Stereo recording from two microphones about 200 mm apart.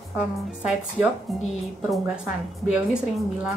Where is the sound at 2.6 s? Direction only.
5° right (ahead or behind).